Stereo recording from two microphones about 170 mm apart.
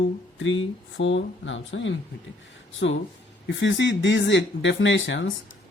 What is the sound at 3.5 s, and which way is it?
Speech, 90° left.